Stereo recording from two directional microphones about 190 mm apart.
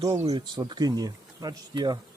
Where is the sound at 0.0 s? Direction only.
30° right (ahead or behind).